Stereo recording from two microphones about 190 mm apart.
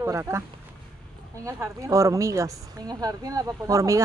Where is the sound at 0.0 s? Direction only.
15° right (ahead or behind).